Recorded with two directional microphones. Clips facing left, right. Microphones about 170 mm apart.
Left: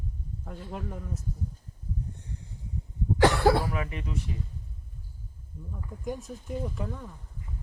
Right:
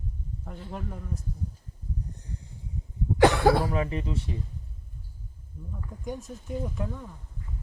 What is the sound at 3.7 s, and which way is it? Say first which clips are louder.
Speech: right 4 dB; 30° right (ahead or behind).